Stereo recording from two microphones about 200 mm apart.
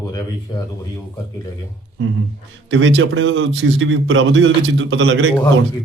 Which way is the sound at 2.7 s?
70° right (ahead or behind).